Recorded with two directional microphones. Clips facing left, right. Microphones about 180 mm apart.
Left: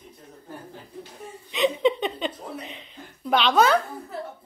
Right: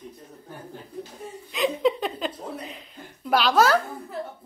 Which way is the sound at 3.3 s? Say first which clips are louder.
Even; centre (ahead or behind).